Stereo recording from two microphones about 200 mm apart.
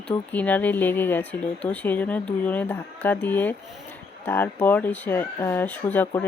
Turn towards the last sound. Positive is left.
turn(degrees=10)  # may be behind; listen again after turning